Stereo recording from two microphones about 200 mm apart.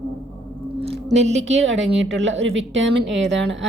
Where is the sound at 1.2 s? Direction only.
35° right (ahead or behind).